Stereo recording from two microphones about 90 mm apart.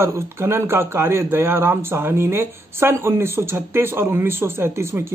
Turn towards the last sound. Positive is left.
turn(degrees=-25)  # may be behind; listen again after turning